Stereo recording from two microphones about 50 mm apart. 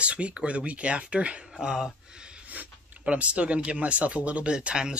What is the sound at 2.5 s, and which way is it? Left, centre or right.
Speech, right.